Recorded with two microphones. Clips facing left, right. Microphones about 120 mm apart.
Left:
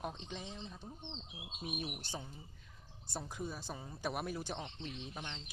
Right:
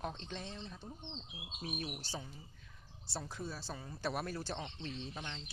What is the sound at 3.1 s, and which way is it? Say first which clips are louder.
Speech: left 1 dB; 15° left (ahead or behind).